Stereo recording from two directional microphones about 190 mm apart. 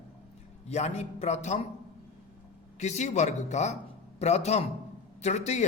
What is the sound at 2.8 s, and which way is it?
A man's voice, 35° left (ahead or behind).